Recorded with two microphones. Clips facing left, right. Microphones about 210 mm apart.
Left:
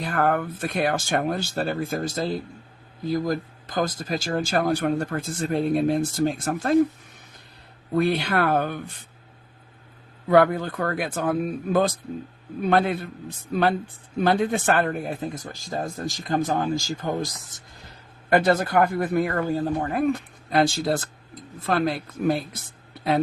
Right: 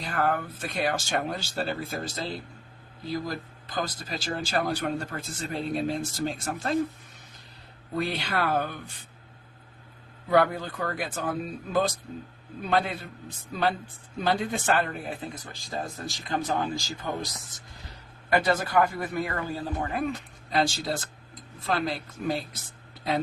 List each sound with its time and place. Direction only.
0.0 s speech: 55° left (ahead or behind)
7.9 s speech: 55° left (ahead or behind)
10.2 s speech: 55° left (ahead or behind)